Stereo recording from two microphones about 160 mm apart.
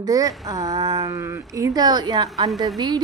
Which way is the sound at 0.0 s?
20° right (ahead or behind).